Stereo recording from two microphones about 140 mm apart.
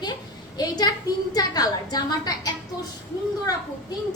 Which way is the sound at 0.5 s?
30° left (ahead or behind).